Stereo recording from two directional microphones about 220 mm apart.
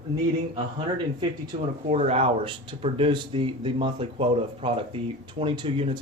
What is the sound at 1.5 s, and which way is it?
Speech, 25° right (ahead or behind).